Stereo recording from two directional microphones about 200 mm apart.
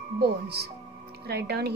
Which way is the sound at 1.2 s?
55° right (ahead or behind).